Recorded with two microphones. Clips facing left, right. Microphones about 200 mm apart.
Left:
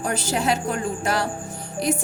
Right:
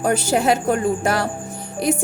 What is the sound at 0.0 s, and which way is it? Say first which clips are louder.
A woman's voice: right 6 dB; 55° right (ahead or behind).